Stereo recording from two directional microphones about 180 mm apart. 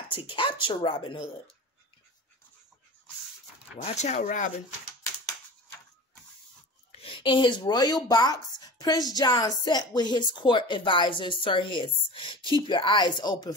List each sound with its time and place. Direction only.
0.1 s a woman's voice: 30° left (ahead or behind)
3.8 s speech: 40° left (ahead or behind)
6.9 s a woman's voice: 30° left (ahead or behind)